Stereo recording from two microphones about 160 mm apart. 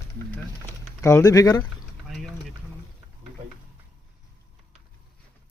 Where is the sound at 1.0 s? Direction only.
20° left (ahead or behind).